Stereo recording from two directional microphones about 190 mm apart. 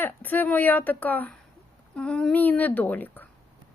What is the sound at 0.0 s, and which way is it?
A woman's voice, 10° left (ahead or behind).